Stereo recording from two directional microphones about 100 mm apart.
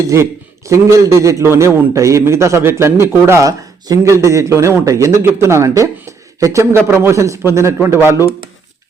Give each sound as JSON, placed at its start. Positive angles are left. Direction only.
{"t": 0.1, "sound": "a man's voice", "side_deg": -30}